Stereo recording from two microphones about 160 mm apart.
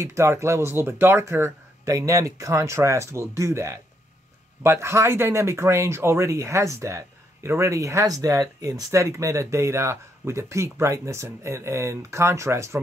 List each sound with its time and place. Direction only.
0.0 s speech: 15° right (ahead or behind)